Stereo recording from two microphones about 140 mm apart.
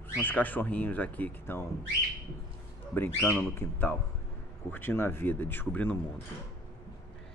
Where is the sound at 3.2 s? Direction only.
5° left (ahead or behind).